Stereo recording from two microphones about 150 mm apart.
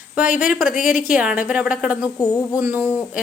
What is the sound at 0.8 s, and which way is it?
Speech, 60° left (ahead or behind).